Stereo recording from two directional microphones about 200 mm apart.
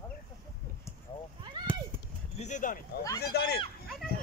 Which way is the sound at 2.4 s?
40° left (ahead or behind).